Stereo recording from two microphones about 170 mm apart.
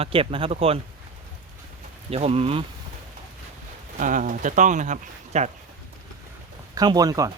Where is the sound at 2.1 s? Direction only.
35° right (ahead or behind).